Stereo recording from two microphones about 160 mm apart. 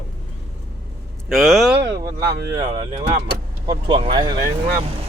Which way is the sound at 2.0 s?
25° right (ahead or behind).